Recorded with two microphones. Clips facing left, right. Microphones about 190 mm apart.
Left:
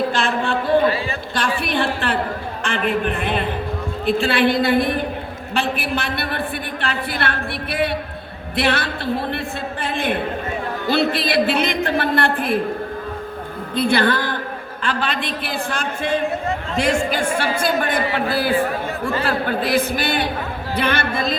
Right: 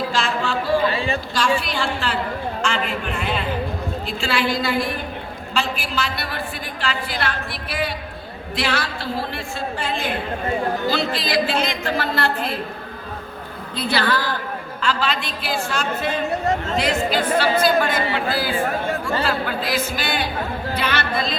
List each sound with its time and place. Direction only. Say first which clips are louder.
0.1 s a sound: left 2 dB; 55° left (ahead or behind)
1.4 s a woman's voice: left 2 dB; 55° left (ahead or behind)
13.7 s a woman's voice: left 4 dB; 50° left (ahead or behind)
17.3 s a woman's voice: right 3 dB; 50° left (ahead or behind)